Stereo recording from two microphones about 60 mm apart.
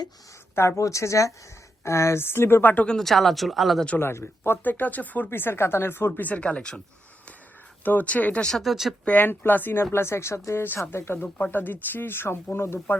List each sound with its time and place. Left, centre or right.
0.8 s speech: left
2.8 s speech: centre
3.9 s speech: left
5.3 s speech: left; by 6.8 s centre
7.9 s speech: left
8.5 s speech: centre
9.0 s speech: left